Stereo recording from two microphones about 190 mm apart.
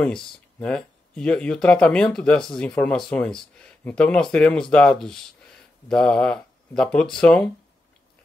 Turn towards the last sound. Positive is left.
turn(degrees=5)  # may be behind; listen again after turning